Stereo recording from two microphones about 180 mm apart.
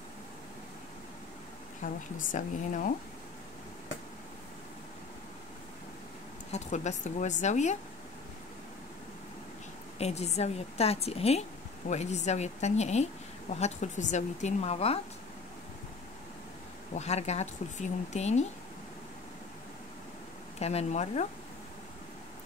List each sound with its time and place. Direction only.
1.8 s speech: 45° left (ahead or behind)
6.5 s a woman's voice: 40° left (ahead or behind)
9.9 s a woman's voice: 35° left (ahead or behind)
16.9 s a woman's voice: 40° left (ahead or behind)
20.5 s a woman's voice: 35° left (ahead or behind)